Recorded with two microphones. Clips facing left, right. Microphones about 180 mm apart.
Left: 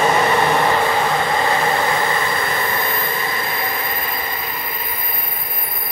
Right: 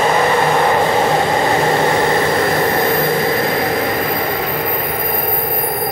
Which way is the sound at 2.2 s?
70° right (ahead or behind).